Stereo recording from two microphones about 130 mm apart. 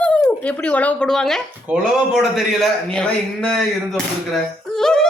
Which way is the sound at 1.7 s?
5° right (ahead or behind).